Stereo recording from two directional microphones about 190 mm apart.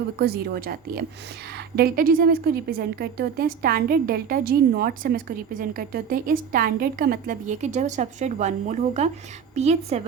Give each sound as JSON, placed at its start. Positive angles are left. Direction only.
{"t": 0.2, "sound": "a woman's voice", "side_deg": -55}